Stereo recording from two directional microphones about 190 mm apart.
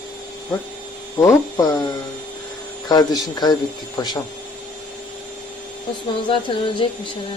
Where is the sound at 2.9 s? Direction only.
20° left (ahead or behind).